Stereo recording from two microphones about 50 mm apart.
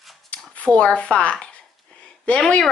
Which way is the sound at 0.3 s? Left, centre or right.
Left.